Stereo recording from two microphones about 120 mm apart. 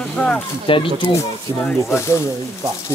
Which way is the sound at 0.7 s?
45° left (ahead or behind).